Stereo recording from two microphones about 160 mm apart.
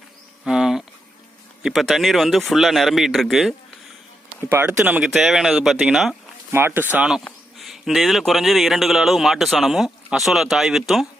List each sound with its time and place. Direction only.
0.4 s a sound: 5° right (ahead or behind)
1.6 s speech: centre (ahead or behind)
4.4 s speech: 15° right (ahead or behind)
4.8 s speech: 5° right (ahead or behind)
6.5 s speech: 15° right (ahead or behind)